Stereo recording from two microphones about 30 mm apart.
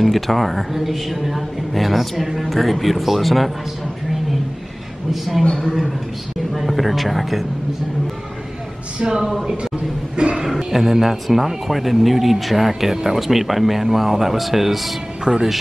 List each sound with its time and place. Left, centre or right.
0.0 s a woman's voice: centre
5.1 s a woman's voice: centre
5.5 s a man's voice: left
6.5 s a woman's voice: centre
9.2 s a woman's voice: centre
10.1 s speech: right
10.7 s a woman's voice: centre
15.3 s speech: right